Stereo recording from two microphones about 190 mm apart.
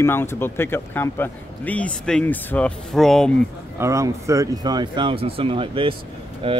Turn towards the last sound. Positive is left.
turn(degrees=-30)  # may be behind; listen again after turning